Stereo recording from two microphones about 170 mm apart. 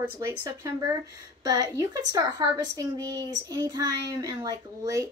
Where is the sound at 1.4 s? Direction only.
20° right (ahead or behind).